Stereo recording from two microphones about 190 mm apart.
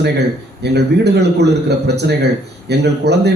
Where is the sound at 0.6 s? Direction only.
60° right (ahead or behind).